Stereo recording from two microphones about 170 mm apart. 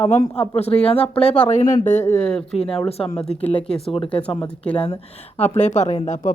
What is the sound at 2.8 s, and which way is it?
Speech, 35° left (ahead or behind).